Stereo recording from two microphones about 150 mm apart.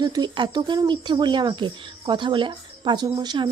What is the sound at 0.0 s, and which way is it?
Speech, 30° right (ahead or behind).